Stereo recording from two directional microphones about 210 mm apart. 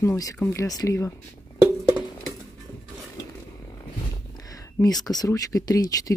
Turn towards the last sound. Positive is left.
turn(degrees=15)  # may be behind; listen again after turning